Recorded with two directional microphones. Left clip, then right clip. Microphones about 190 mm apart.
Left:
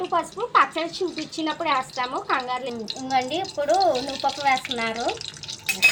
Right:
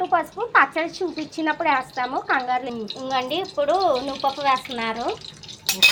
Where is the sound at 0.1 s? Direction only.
Centre (ahead or behind).